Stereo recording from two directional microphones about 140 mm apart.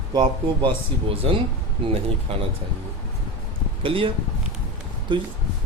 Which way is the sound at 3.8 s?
40° right (ahead or behind).